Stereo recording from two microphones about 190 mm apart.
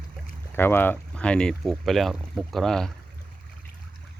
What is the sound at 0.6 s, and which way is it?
Speech, 10° left (ahead or behind).